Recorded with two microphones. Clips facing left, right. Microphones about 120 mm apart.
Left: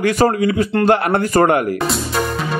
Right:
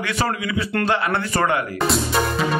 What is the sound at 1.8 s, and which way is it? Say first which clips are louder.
Music: even; centre (ahead or behind).